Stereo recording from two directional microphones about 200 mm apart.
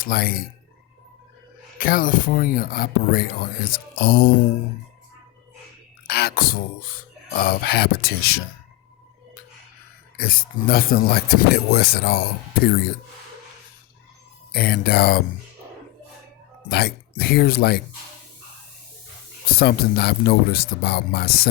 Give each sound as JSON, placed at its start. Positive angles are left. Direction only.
{"t": 0.0, "sound": "speech", "side_deg": 50}
{"t": 1.8, "sound": "speech", "side_deg": 45}
{"t": 6.1, "sound": "speech", "side_deg": 50}
{"t": 10.2, "sound": "speech", "side_deg": 45}
{"t": 14.5, "sound": "speech", "side_deg": 50}
{"t": 16.6, "sound": "speech", "side_deg": 50}
{"t": 19.5, "sound": "speech", "side_deg": 50}